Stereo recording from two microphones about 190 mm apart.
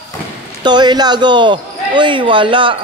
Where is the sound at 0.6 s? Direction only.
25° right (ahead or behind).